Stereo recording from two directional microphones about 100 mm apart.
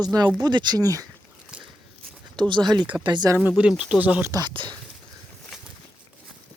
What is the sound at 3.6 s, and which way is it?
Speech, 10° right (ahead or behind).